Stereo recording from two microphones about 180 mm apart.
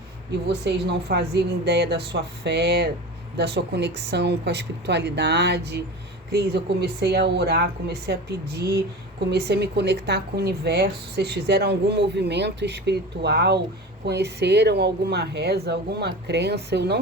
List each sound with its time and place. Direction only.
0.4 s a woman's voice: 70° right (ahead or behind)